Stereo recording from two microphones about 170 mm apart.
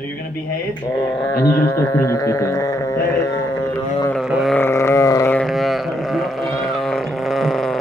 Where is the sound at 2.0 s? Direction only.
15° left (ahead or behind).